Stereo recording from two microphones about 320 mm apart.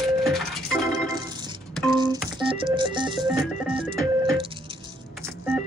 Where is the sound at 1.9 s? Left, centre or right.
Centre.